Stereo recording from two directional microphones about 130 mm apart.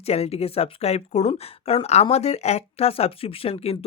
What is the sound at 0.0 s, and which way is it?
Speech, 50° left (ahead or behind).